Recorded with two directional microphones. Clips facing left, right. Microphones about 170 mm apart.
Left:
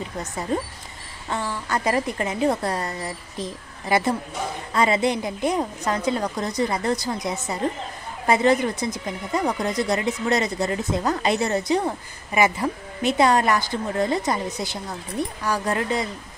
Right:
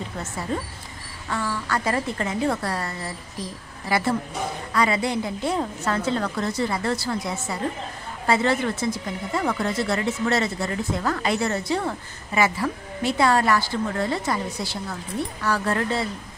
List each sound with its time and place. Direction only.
1.3 s a woman's voice: 20° left (ahead or behind)